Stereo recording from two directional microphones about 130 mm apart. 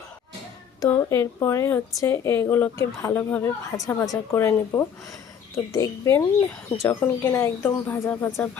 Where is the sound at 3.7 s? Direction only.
25° left (ahead or behind).